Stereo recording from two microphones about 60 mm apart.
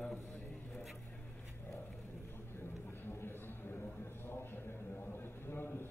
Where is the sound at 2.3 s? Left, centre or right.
Left.